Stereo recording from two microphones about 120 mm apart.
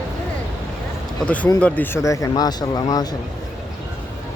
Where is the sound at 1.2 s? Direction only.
10° left (ahead or behind).